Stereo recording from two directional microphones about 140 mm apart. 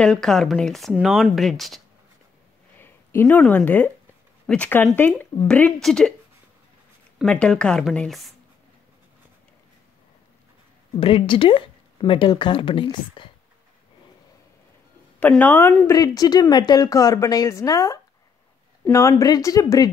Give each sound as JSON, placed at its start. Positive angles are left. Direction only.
{"t": 0.0, "sound": "speech", "side_deg": 5}
{"t": 2.8, "sound": "speech", "side_deg": 15}
{"t": 7.2, "sound": "speech", "side_deg": 5}
{"t": 11.0, "sound": "speech", "side_deg": 40}
{"t": 15.1, "sound": "speech", "side_deg": 10}
{"t": 15.9, "sound": "speech", "side_deg": 25}